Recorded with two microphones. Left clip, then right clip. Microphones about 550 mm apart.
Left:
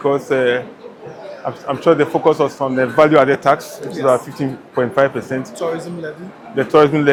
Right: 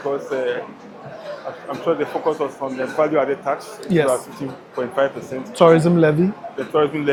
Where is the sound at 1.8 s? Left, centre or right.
Left.